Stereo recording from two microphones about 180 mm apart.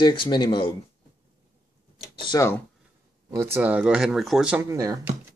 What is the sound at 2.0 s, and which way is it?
Speech, 25° left (ahead or behind).